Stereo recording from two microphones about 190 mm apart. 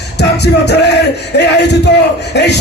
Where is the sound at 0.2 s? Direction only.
60° left (ahead or behind).